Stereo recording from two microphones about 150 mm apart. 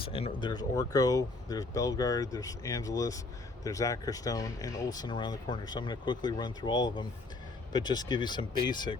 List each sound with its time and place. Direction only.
0.0 s speech: 40° left (ahead or behind)